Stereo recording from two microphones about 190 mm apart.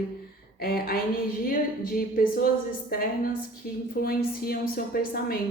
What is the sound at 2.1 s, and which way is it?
A woman's voice, 50° left (ahead or behind).